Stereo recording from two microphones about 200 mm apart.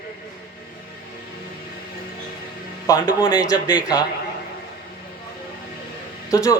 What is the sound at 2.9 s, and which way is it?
Speech, 20° left (ahead or behind).